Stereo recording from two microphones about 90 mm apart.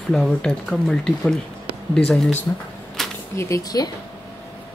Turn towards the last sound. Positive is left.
turn(degrees=35)  # may be behind; listen again after turning